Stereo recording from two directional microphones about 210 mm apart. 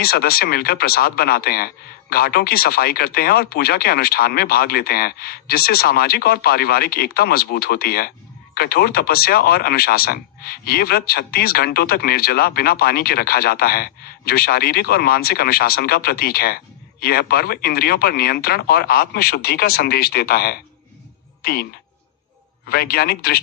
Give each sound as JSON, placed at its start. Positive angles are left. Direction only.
{"t": 0.0, "sound": "speech", "side_deg": 45}
{"t": 22.7, "sound": "speech", "side_deg": 45}